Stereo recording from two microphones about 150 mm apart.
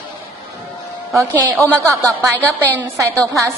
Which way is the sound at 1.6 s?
20° right (ahead or behind).